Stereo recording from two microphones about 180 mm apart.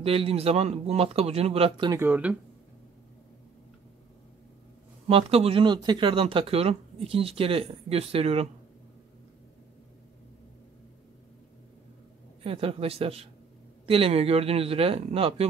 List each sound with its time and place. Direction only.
0.0 s speech: 30° right (ahead or behind)
1.9 s speech: 10° right (ahead or behind)
5.0 s speech: 35° right (ahead or behind)
12.4 s speech: 30° right (ahead or behind)